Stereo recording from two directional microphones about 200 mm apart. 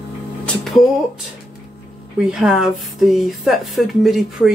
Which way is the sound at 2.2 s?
5° right (ahead or behind).